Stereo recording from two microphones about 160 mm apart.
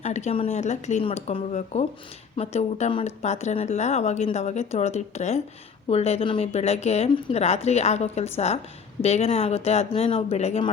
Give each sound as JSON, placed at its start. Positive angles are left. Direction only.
{"t": 0.0, "sound": "speech", "side_deg": 45}